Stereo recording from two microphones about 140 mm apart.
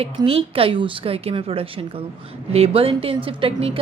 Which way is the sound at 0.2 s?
40° right (ahead or behind).